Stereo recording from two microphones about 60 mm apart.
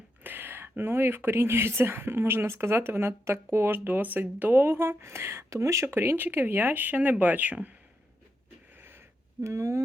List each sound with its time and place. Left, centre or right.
0.2 s speech: right
5.8 s speech: right
9.4 s speech: right